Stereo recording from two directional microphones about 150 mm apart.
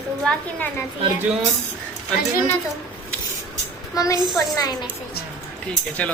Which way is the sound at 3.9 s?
25° left (ahead or behind).